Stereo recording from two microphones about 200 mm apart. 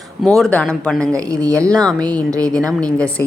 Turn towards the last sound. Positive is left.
turn(degrees=5)  # may be behind; listen again after turning